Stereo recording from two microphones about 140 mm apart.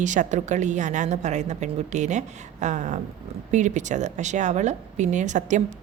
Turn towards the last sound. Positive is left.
turn(degrees=-60)  # may be behind; listen again after turning